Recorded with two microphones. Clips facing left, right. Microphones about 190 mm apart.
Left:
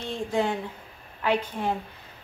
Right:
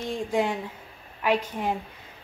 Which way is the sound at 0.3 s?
10° right (ahead or behind).